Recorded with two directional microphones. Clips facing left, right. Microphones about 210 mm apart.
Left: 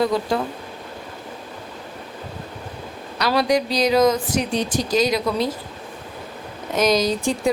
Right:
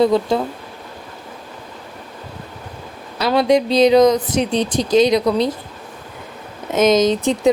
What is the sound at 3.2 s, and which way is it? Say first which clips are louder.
Speech: right 4 dB; 25° right (ahead or behind).